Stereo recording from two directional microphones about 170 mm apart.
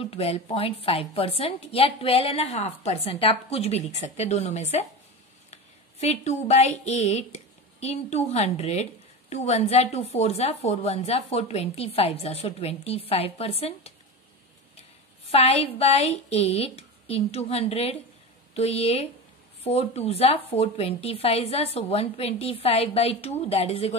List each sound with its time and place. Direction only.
0.1 s a woman's voice: 35° left (ahead or behind)
15.3 s a woman's voice: 35° left (ahead or behind)